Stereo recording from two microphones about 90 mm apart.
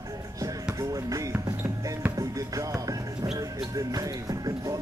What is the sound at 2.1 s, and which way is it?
Music, 40° right (ahead or behind).